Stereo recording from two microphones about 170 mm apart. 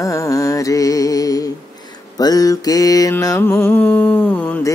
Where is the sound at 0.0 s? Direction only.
20° left (ahead or behind).